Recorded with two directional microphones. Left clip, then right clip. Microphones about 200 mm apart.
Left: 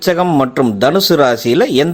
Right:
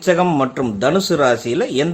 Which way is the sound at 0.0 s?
35° left (ahead or behind).